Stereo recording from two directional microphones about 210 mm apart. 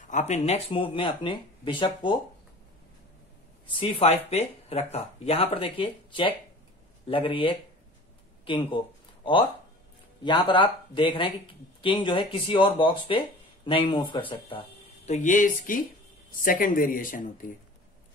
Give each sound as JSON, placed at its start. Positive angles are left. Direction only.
{"t": 0.0, "sound": "speech", "side_deg": 35}
{"t": 3.6, "sound": "speech", "side_deg": 25}
{"t": 15.0, "sound": "speech", "side_deg": 35}